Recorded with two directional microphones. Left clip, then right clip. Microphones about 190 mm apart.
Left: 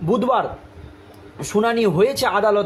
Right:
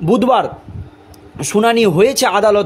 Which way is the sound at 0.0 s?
50° right (ahead or behind).